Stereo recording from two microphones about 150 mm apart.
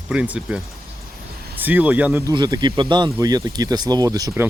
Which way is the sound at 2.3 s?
25° right (ahead or behind).